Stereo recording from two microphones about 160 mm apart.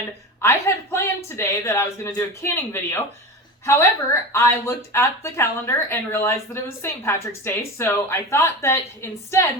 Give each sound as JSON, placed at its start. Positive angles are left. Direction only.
{"t": 0.4, "sound": "speech", "side_deg": 15}